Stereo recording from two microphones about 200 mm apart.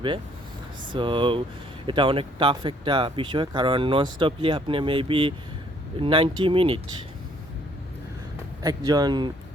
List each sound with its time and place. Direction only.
0.9 s speech: 25° right (ahead or behind)
8.6 s speech: 20° right (ahead or behind)